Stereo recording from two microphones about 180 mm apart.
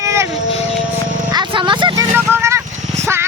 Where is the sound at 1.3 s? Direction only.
25° right (ahead or behind).